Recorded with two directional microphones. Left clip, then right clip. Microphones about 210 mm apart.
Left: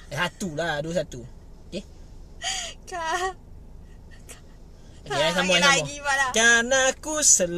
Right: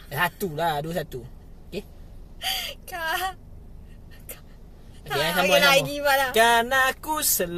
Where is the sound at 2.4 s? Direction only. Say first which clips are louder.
Right 2 dB; 10° right (ahead or behind).